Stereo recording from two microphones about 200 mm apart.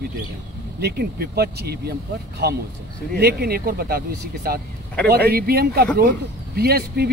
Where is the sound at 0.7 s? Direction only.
55° right (ahead or behind).